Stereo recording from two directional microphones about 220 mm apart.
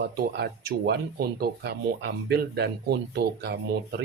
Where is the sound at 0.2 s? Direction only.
50° right (ahead or behind).